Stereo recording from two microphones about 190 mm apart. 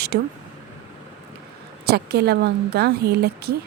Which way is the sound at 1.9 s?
60° right (ahead or behind).